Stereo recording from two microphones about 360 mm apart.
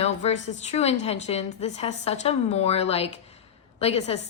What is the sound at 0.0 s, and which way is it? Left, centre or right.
A woman's voice, centre.